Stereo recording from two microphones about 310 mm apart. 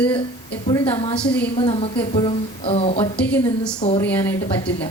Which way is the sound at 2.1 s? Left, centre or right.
Centre.